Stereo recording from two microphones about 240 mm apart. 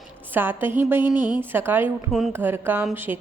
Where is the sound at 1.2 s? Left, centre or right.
Centre.